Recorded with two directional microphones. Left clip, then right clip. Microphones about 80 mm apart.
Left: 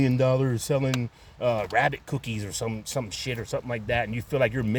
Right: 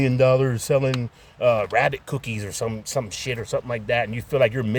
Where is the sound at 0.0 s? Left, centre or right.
Right.